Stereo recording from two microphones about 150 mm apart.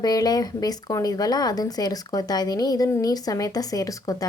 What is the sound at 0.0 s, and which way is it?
Speech, 25° left (ahead or behind).